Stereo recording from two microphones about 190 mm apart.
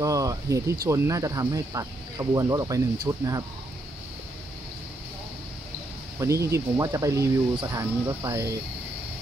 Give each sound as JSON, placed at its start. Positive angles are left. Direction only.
{"t": 0.0, "sound": "speech", "side_deg": -15}
{"t": 6.1, "sound": "speech", "side_deg": -15}